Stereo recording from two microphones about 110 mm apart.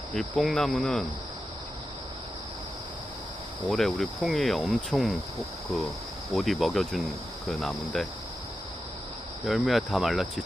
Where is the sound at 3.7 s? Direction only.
5° left (ahead or behind).